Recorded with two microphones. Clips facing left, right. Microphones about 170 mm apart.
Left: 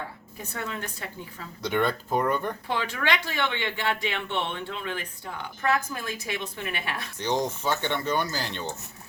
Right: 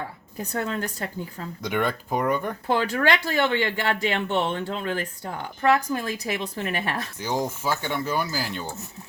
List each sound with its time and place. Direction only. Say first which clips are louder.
0.5 s speech: right 6 dB; 40° right (ahead or behind)
1.6 s speech: even; 10° right (ahead or behind)
2.6 s speech: right 8 dB; 45° right (ahead or behind)
7.2 s speech: left 3 dB; 5° right (ahead or behind)